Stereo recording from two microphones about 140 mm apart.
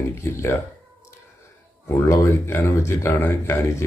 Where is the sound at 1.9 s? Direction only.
15° left (ahead or behind).